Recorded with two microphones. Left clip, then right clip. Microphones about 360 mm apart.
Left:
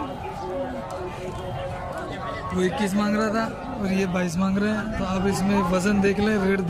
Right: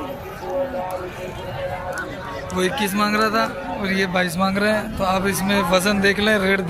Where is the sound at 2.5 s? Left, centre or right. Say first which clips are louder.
Right 4 dB; centre.